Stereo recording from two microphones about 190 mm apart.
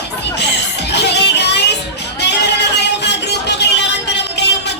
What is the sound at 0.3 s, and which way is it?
Music, 65° left (ahead or behind).